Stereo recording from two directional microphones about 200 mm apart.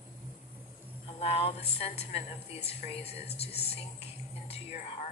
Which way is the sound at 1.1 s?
30° left (ahead or behind).